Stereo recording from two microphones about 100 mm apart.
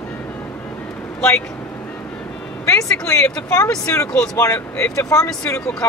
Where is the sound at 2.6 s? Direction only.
30° left (ahead or behind).